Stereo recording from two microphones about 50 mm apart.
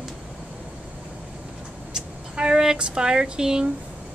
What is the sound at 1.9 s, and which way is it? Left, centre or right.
Speech, centre.